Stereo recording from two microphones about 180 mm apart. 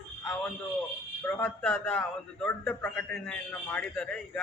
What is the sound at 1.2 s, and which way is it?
A man's voice, 10° left (ahead or behind).